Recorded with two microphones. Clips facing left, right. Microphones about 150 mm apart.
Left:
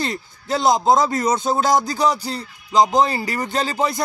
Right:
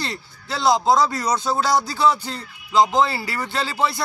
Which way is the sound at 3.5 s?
45° left (ahead or behind).